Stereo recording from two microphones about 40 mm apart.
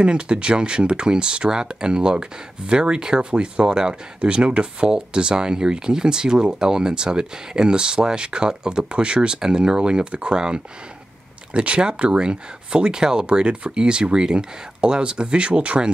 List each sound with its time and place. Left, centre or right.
0.0 s speech: right